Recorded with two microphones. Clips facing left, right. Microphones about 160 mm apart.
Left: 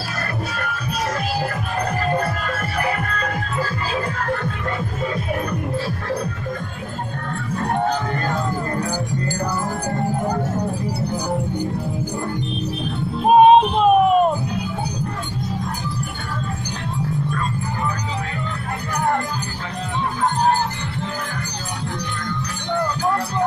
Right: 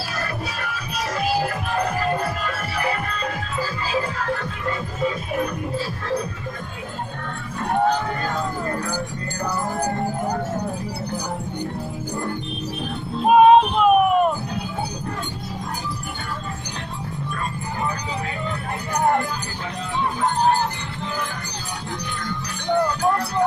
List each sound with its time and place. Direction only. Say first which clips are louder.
13.3 s music: left 1 dB; 25° left (ahead or behind)